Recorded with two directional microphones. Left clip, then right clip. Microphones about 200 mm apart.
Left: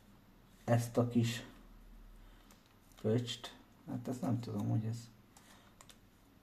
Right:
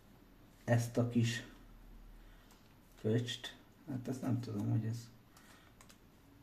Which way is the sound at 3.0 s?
15° left (ahead or behind).